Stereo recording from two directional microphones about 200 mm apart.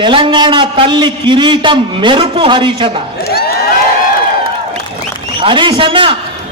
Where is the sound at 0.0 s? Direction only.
25° right (ahead or behind).